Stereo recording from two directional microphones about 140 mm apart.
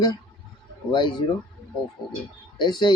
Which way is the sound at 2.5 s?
30° left (ahead or behind).